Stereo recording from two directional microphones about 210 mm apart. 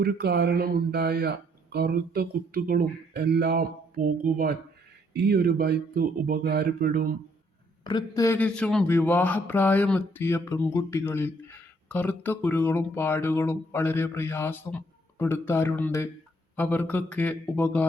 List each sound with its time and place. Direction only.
0.0 s speech: 50° right (ahead or behind)
7.9 s speech: 20° left (ahead or behind)